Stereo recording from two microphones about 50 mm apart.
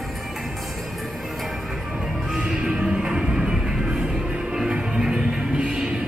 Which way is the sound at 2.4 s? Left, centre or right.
Centre.